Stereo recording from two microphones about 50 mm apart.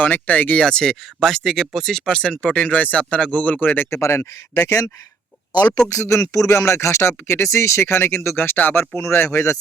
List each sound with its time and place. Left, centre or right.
0.0 s speech: left
0.6 s speech: centre
3.6 s speech: left
3.8 s speech: left
5.9 s speech: left
9.0 s speech: left